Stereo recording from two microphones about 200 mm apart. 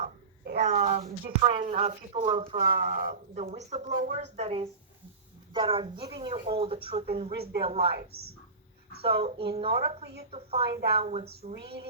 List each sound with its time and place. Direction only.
0.6 s a sound: 35° right (ahead or behind)
1.0 s a woman's voice: 45° right (ahead or behind)
1.6 s speech: 35° right (ahead or behind)
3.4 s a woman's voice: 30° right (ahead or behind)
7.3 s a woman's voice: 50° right (ahead or behind)
7.6 s a woman's voice: 25° right (ahead or behind)
7.9 s a woman's voice: 50° right (ahead or behind)
9.0 s a woman's voice: 30° right (ahead or behind)
10.7 s a sound: 55° right (ahead or behind)
10.9 s speech: 30° right (ahead or behind)
11.5 s a sound: 55° right (ahead or behind)